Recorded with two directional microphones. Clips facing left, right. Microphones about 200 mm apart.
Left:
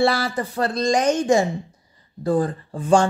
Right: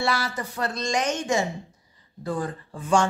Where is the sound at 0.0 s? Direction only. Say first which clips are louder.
Left 7 dB; 35° left (ahead or behind).